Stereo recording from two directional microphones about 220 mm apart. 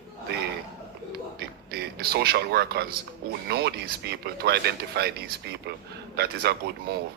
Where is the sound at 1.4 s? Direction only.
45° right (ahead or behind).